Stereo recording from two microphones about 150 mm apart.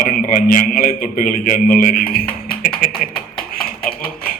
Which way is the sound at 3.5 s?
75° left (ahead or behind).